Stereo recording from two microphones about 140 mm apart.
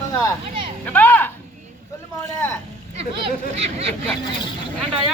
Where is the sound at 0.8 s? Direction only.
15° left (ahead or behind).